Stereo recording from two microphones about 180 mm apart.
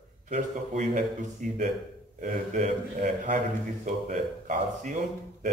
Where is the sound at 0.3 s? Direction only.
45° right (ahead or behind).